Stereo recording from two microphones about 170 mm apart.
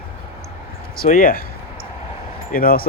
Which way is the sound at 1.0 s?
55° left (ahead or behind).